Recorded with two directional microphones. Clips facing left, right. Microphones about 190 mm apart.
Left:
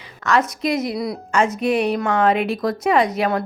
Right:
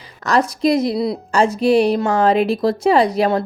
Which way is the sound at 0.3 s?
35° right (ahead or behind).